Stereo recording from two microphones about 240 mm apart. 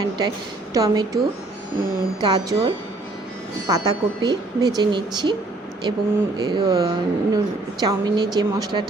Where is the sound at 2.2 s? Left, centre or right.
Centre.